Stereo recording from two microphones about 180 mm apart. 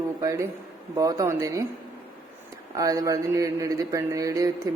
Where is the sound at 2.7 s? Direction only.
20° right (ahead or behind).